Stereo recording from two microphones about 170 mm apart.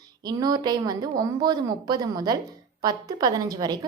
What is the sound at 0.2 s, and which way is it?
A woman's voice, 25° right (ahead or behind).